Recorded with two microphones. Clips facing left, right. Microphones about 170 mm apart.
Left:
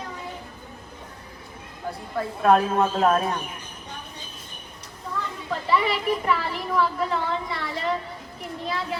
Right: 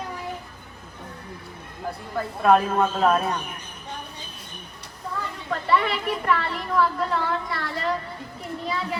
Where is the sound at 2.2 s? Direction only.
Centre (ahead or behind).